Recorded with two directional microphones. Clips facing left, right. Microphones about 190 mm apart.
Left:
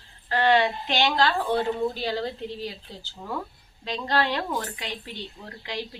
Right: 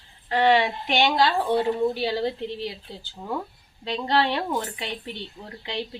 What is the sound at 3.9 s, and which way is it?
Speech, 25° right (ahead or behind).